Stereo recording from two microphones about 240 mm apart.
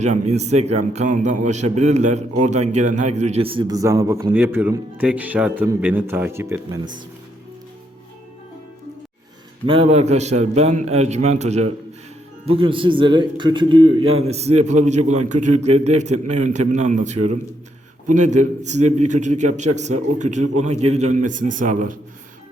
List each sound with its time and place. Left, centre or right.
0.0 s a man's voice: right
9.6 s a man's voice: right